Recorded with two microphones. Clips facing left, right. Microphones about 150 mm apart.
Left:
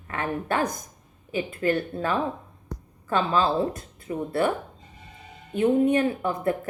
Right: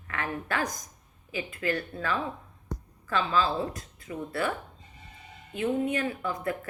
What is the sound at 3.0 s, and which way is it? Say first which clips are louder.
A woman's voice: left 4 dB; 30° left (ahead or behind).